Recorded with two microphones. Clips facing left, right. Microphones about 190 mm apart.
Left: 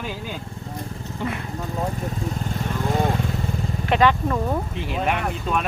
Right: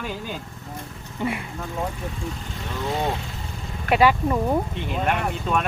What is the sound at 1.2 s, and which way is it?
Speech, 10° right (ahead or behind).